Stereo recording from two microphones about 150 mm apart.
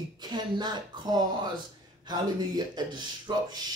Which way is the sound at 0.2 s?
30° right (ahead or behind).